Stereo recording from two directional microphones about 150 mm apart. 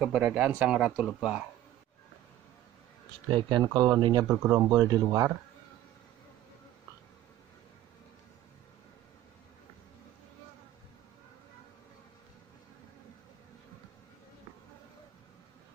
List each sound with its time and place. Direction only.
0.0 s speech: 5° right (ahead or behind)
3.3 s speech: 35° right (ahead or behind)
4.3 s speech: 15° right (ahead or behind)